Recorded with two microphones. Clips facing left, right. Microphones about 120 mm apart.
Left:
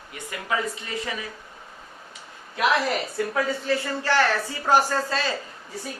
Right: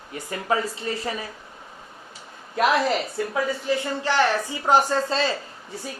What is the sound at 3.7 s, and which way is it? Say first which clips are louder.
Speech: even; 20° right (ahead or behind).